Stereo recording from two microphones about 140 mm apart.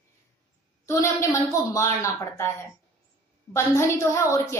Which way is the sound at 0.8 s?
20° left (ahead or behind).